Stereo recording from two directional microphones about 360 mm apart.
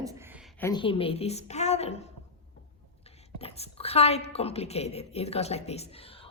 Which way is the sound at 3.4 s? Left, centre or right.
Centre.